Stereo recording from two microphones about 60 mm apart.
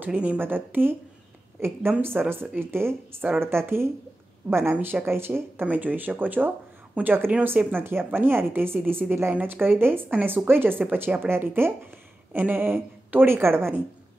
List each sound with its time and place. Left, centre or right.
0.0 s speech: right
0.4 s a woman's voice: right
5.7 s speech: right